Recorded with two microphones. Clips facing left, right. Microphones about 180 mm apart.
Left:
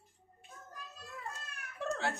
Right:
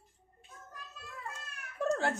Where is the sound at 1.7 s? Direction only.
45° right (ahead or behind).